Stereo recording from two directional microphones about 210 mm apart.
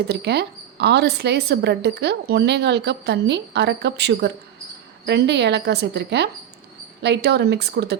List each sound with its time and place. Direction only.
0.1 s a woman's voice: 50° right (ahead or behind)